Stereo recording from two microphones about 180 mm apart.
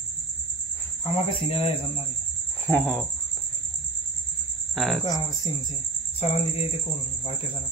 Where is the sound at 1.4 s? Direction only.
30° left (ahead or behind).